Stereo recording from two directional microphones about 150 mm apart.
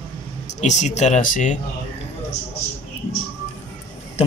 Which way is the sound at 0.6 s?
50° left (ahead or behind).